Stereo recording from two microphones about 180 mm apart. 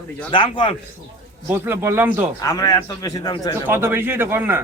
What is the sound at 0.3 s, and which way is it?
Speech, 25° left (ahead or behind).